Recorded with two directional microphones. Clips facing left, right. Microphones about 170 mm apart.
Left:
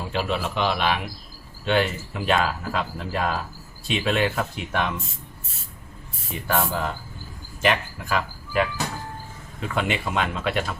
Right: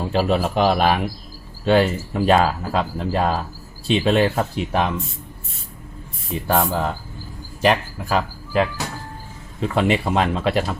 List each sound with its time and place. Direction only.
0.1 s speech: 40° right (ahead or behind)
6.3 s speech: 30° right (ahead or behind)